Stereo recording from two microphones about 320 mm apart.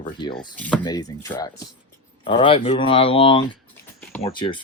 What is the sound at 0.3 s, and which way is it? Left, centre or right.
Speech, centre.